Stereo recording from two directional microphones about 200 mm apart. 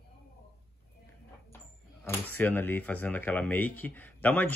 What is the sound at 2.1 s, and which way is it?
A woman's voice, 10° left (ahead or behind).